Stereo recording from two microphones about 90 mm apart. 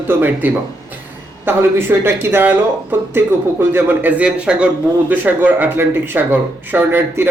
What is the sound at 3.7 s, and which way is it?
A man's voice, 20° right (ahead or behind).